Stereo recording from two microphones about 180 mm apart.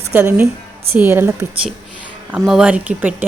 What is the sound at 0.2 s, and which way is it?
A woman's voice, 15° right (ahead or behind).